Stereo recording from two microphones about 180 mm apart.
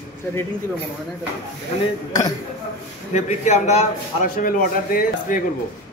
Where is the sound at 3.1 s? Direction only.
40° left (ahead or behind).